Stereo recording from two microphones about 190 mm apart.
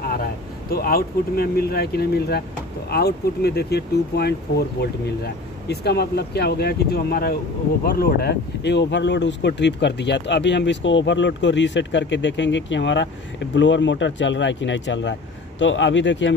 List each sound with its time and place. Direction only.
0.1 s speech: 50° left (ahead or behind); by 16.3 s 70° left (ahead or behind)